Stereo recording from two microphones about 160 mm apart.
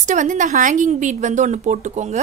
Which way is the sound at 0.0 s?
50° right (ahead or behind).